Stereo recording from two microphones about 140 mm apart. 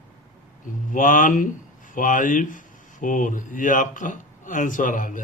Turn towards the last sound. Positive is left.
turn(degrees=70)  # may be behind; listen again after turning